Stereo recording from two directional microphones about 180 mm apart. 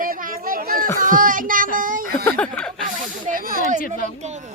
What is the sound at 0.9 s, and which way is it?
Child singing, 50° right (ahead or behind).